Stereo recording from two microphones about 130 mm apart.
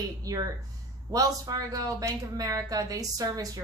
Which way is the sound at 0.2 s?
30° right (ahead or behind).